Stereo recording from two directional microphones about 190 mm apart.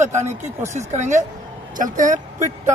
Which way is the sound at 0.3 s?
15° right (ahead or behind).